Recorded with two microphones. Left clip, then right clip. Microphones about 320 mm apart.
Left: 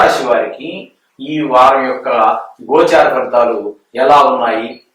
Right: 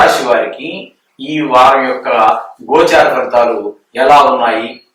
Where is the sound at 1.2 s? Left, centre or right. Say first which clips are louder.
Right 1 dB; centre.